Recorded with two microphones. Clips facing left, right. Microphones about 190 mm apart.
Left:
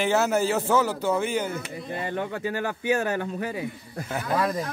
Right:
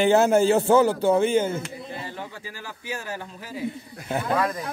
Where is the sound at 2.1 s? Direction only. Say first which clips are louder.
Left 9 dB; 60° left (ahead or behind).